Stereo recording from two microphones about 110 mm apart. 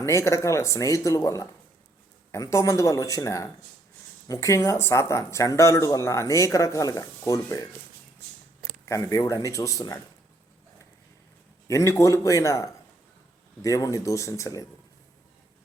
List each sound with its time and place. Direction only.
0.0 s speech: 25° left (ahead or behind)
8.9 s speech: 30° left (ahead or behind)
11.7 s speech: 25° left (ahead or behind)